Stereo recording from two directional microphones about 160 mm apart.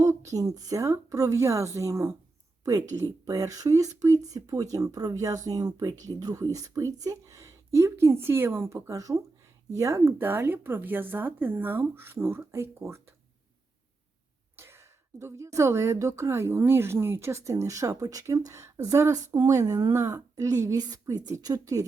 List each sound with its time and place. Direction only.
0.0 s a woman's voice: 20° right (ahead or behind)
14.5 s a woman's voice: 15° right (ahead or behind)